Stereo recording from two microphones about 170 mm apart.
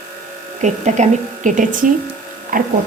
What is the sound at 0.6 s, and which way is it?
Speech, 45° right (ahead or behind).